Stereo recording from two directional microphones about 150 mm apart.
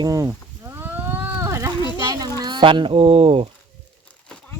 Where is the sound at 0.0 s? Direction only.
25° right (ahead or behind).